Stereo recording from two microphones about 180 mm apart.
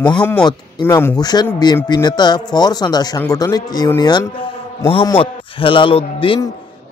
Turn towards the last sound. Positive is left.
turn(degrees=30)  # may be behind; listen again after turning